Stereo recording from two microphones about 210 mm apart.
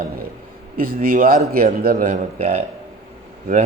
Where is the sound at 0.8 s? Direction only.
45° right (ahead or behind).